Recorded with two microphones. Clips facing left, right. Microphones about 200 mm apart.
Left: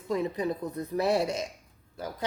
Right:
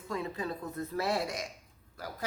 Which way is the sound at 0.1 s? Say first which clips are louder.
Left 7 dB; 20° left (ahead or behind).